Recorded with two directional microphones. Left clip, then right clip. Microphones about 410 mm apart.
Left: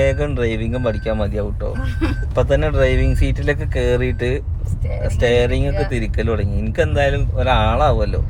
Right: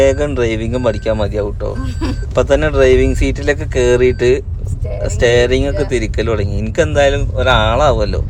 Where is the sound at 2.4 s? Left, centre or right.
Right.